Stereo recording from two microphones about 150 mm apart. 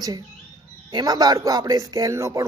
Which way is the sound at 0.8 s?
25° right (ahead or behind).